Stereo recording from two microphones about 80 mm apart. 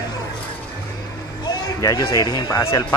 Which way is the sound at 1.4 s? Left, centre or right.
Left.